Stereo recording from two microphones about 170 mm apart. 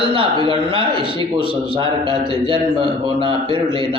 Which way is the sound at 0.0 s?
30° right (ahead or behind).